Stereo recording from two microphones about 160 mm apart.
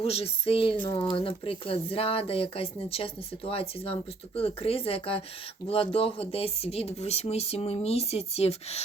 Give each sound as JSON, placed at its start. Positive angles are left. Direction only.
{"t": 0.0, "sound": "speech", "side_deg": 40}